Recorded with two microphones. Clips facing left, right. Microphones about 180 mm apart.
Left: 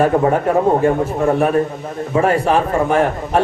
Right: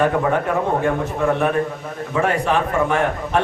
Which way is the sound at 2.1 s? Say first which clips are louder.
Left 4 dB; 35° left (ahead or behind).